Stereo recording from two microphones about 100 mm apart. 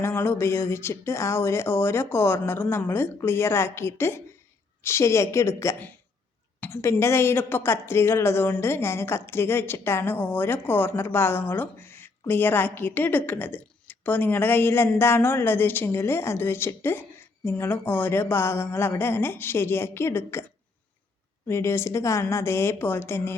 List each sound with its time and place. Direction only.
0.0 s a woman's voice: 25° left (ahead or behind)
21.4 s a woman's voice: 25° left (ahead or behind)